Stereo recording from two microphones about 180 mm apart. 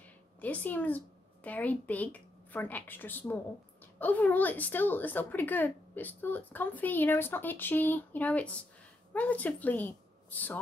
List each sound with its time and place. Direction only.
0.0 s a woman's voice: 10° left (ahead or behind)